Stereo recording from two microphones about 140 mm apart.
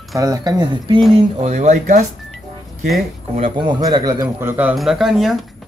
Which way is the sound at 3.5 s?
35° right (ahead or behind).